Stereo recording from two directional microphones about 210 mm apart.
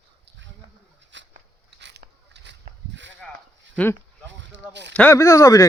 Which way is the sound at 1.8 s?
55° right (ahead or behind).